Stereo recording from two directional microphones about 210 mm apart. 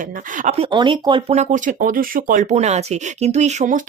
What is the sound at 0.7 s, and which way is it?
Speech, 20° right (ahead or behind).